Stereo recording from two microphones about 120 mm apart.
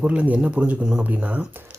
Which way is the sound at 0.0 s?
10° right (ahead or behind).